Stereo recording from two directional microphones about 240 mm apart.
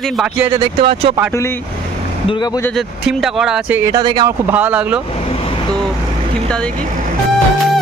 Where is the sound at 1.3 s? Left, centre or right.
Centre.